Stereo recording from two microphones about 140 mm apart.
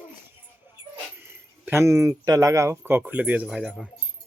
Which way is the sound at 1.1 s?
15° right (ahead or behind).